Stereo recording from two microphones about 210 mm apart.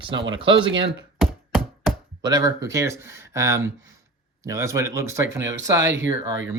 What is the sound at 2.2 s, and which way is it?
Speech, 15° right (ahead or behind).